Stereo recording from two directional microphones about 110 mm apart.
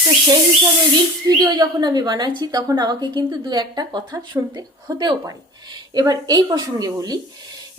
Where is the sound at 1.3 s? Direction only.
40° right (ahead or behind).